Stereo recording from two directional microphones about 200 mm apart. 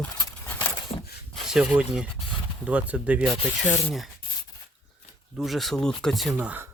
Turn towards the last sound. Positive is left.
turn(degrees=-5)  # may be behind; listen again after turning